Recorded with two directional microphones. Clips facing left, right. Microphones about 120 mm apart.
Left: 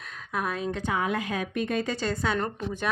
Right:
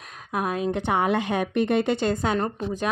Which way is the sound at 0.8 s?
70° right (ahead or behind).